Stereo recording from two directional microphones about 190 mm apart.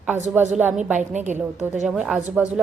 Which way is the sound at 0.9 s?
40° right (ahead or behind).